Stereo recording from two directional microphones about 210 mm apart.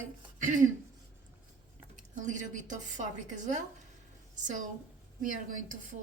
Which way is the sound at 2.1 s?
35° right (ahead or behind).